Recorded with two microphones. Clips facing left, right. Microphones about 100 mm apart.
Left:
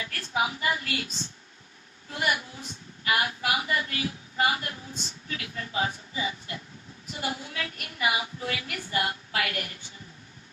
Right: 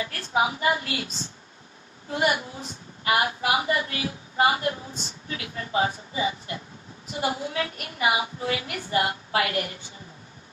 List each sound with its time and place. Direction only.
0.0 s a woman's voice: 25° right (ahead or behind)
2.0 s a woman's voice: 30° right (ahead or behind)